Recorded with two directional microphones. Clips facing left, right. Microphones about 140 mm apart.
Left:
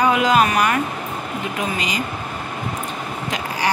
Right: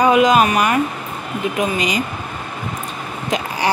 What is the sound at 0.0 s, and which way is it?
Speech, 20° right (ahead or behind).